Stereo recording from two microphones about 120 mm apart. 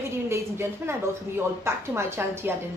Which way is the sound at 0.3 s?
20° right (ahead or behind).